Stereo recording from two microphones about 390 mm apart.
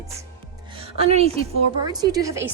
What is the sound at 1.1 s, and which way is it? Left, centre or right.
A woman's voice, centre.